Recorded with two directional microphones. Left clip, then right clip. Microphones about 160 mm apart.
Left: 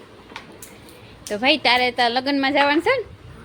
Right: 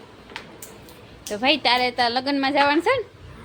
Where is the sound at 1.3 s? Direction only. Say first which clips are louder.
Left 2 dB; 10° left (ahead or behind).